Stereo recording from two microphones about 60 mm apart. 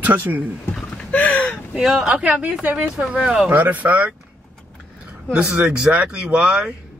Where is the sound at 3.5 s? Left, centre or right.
Right.